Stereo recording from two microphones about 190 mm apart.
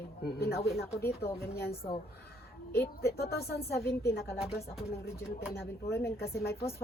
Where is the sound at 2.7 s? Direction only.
55° left (ahead or behind).